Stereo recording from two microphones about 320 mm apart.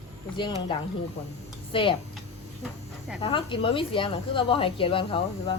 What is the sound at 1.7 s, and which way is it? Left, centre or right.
Speech, centre.